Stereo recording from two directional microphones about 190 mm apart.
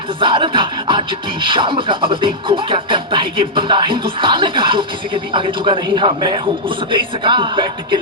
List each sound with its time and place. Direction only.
0.2 s music: 25° right (ahead or behind)